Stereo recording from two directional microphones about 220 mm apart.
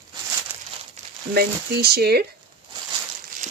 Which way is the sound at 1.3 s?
45° right (ahead or behind).